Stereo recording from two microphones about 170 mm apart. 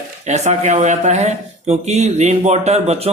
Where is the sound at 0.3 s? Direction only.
45° right (ahead or behind).